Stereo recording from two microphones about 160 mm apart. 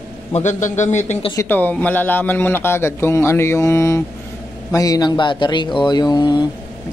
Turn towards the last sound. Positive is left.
turn(degrees=25)  # may be behind; listen again after turning